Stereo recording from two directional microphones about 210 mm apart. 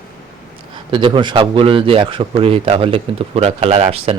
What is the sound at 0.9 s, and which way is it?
Speech, 25° right (ahead or behind).